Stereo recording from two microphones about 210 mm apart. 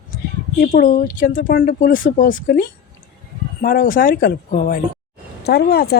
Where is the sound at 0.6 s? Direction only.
40° left (ahead or behind).